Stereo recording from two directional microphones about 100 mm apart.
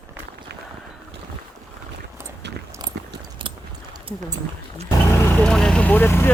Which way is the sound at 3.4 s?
55° right (ahead or behind).